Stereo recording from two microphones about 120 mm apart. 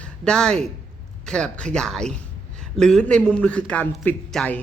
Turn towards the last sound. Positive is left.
turn(degrees=10)  # may be behind; listen again after turning